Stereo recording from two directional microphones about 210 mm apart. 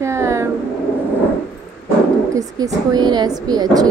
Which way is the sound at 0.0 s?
15° right (ahead or behind).